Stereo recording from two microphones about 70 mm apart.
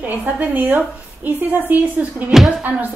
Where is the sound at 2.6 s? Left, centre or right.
Right.